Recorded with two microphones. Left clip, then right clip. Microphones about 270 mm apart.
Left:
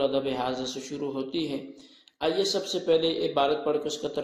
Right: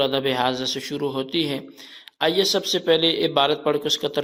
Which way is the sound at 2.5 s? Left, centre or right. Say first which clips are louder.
Right 5 dB; right.